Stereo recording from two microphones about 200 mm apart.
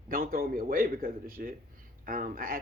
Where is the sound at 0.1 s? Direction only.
45° right (ahead or behind).